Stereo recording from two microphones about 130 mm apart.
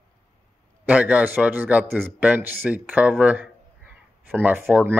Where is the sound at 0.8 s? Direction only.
10° right (ahead or behind).